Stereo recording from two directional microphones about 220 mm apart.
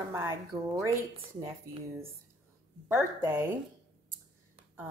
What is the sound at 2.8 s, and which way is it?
Speech, 10° right (ahead or behind).